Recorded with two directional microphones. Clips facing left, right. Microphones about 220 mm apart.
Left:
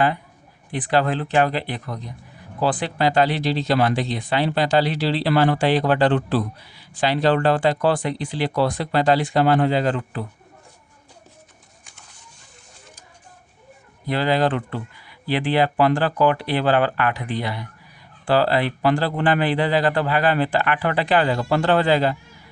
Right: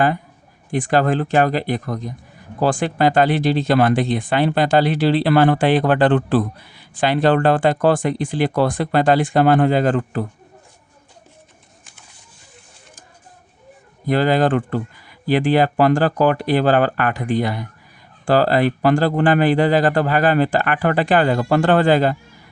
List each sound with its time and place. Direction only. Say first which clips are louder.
0.7 s speech: right 4 dB; 45° right (ahead or behind)
14.1 s speech: right 4 dB; 50° right (ahead or behind)